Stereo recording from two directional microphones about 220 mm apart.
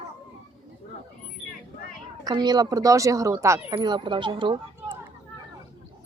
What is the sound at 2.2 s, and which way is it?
Speech, 20° right (ahead or behind).